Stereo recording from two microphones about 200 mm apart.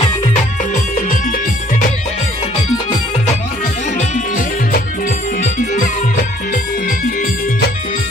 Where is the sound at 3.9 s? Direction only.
40° left (ahead or behind).